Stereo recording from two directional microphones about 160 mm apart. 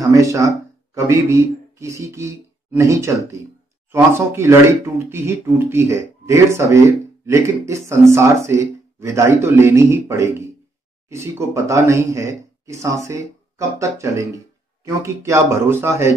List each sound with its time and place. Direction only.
0.0 s speech: 20° right (ahead or behind)